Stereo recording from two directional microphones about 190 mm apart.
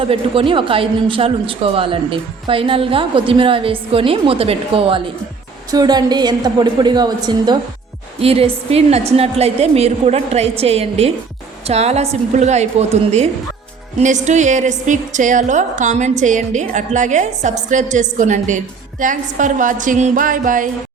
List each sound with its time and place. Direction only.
0.0 s a woman's voice: 30° right (ahead or behind); by 20.7 s 45° right (ahead or behind)